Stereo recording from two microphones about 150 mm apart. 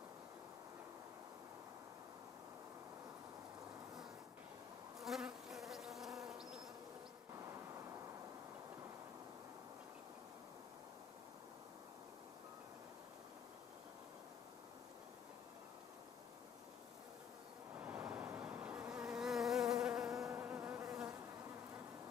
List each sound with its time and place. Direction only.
5.0 s bee: centre (ahead or behind)
17.7 s bee: 10° right (ahead or behind)
20.2 s insect: 15° right (ahead or behind)